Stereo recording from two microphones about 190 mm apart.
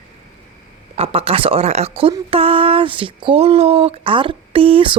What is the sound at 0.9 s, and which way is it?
A woman's voice, 30° right (ahead or behind).